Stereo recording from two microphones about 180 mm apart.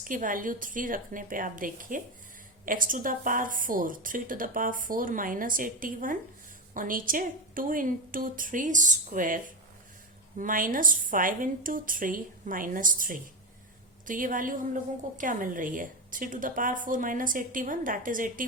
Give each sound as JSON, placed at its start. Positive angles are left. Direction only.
{"t": 0.0, "sound": "a woman's voice", "side_deg": -50}